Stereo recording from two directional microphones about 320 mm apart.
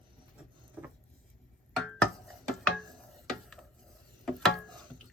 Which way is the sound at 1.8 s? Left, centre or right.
Centre.